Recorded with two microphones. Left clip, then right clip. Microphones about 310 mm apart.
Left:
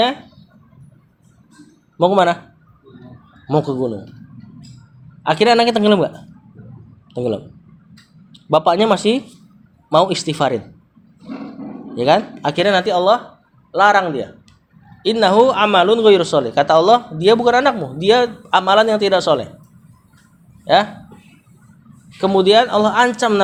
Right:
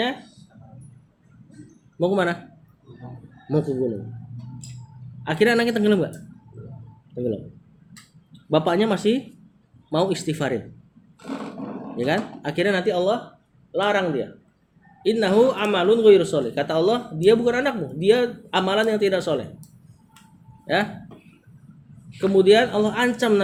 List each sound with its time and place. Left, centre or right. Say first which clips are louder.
2.0 s speech: left 9 dB; centre
5.2 s speech: left 7 dB; centre
8.3 s speech: left 7 dB; centre
11.9 s a man's voice: left 10 dB; centre
22.2 s speech: left 4 dB; centre